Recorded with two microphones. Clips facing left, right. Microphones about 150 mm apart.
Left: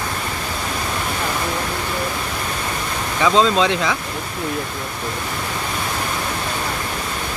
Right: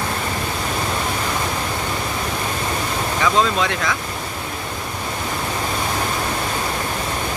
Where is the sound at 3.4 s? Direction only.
20° left (ahead or behind).